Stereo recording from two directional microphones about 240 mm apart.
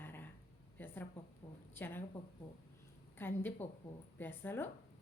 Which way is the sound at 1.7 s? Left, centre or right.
Centre.